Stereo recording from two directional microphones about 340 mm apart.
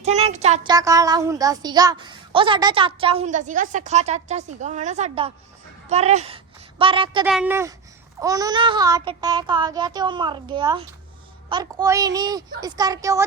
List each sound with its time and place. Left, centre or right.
0.0 s a woman's voice: centre
7.3 s speech: centre